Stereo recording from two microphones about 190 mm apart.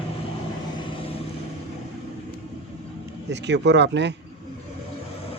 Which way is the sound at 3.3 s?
65° right (ahead or behind).